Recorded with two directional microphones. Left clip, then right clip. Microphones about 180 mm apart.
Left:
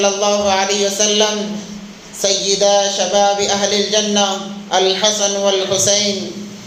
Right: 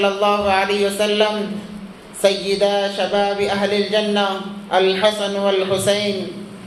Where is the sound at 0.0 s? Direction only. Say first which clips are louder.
Left 2 dB; 20° left (ahead or behind).